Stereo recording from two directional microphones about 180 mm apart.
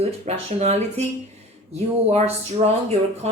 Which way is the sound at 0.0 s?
35° right (ahead or behind).